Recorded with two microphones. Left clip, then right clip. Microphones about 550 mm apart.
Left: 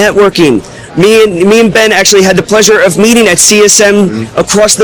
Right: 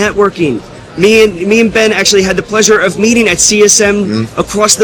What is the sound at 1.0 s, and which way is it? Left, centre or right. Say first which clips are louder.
A man's voice: left 2 dB; left.